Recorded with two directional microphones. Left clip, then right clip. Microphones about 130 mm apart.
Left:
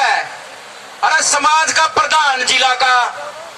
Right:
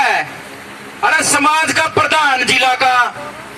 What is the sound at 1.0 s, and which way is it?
A man's voice, 45° left (ahead or behind).